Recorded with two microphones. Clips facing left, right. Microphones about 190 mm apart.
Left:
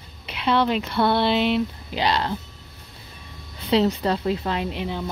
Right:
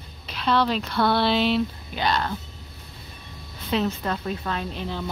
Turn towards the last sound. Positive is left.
turn(degrees=15)  # may be behind; listen again after turning